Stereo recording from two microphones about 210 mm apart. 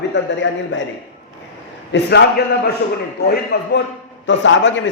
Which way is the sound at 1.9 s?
50° left (ahead or behind).